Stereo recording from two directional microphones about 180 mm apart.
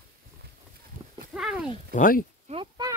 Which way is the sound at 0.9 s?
50° right (ahead or behind).